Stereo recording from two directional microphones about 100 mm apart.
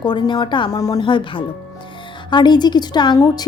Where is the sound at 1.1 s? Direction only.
55° left (ahead or behind).